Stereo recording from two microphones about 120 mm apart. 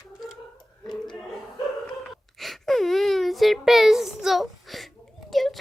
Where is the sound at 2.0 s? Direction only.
Centre (ahead or behind).